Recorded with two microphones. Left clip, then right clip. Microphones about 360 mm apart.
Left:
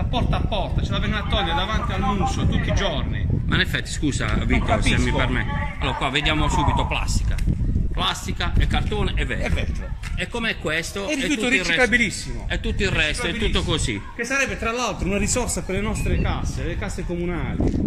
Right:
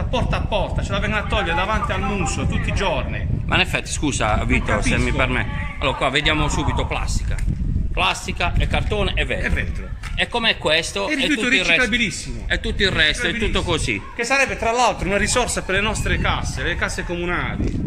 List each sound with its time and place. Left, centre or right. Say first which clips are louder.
0.1 s speech: right 4 dB; centre
3.4 s a man's voice: right 4 dB; centre
8.0 s a man's voice: right 5 dB; centre
11.8 s a man's voice: left 1 dB; left
12.4 s speech: right 5 dB; centre
14.3 s a man's voice: right 5 dB; centre